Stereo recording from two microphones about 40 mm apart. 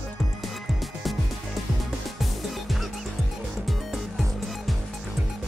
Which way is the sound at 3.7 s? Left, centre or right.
Centre.